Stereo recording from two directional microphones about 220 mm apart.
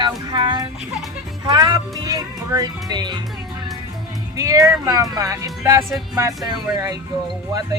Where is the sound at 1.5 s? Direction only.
20° right (ahead or behind).